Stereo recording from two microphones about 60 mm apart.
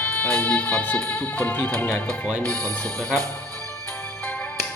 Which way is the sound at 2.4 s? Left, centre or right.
Centre.